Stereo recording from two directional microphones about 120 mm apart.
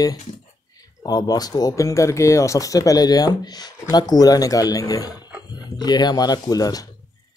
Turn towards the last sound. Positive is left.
turn(degrees=30)  # may be behind; listen again after turning